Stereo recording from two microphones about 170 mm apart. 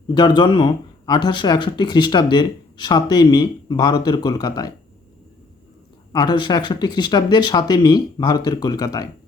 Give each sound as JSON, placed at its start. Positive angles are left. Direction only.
{"t": 0.1, "sound": "speech", "side_deg": 25}
{"t": 6.1, "sound": "speech", "side_deg": 25}